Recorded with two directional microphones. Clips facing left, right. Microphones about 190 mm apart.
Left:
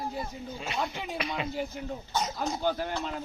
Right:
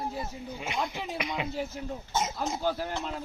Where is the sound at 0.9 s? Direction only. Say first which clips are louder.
Even; centre (ahead or behind).